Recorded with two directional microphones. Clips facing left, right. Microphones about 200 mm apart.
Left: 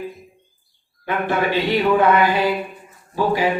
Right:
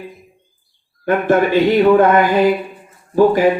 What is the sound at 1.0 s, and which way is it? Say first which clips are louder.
A man's voice: right 7 dB; 45° right (ahead or behind).